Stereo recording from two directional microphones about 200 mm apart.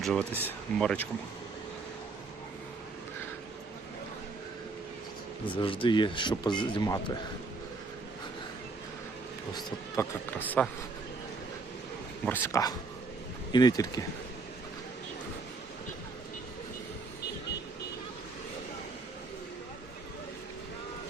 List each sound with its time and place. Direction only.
0.0 s speech: centre (ahead or behind)
5.5 s speech: 25° left (ahead or behind)
9.6 s speech: 15° left (ahead or behind)
12.2 s speech: 10° left (ahead or behind)